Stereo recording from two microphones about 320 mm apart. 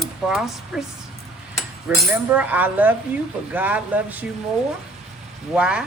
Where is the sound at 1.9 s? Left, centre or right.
Centre.